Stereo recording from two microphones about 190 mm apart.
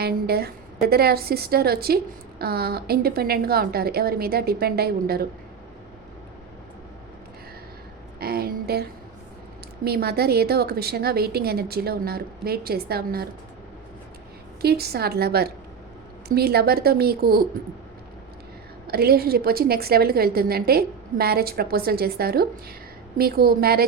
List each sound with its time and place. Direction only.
0.0 s a woman's voice: 55° right (ahead or behind)
8.2 s a woman's voice: 55° right (ahead or behind)
14.6 s a woman's voice: 55° right (ahead or behind)
18.9 s a woman's voice: 55° right (ahead or behind)